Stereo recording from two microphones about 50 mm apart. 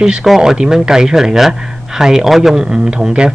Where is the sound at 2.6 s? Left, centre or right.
Centre.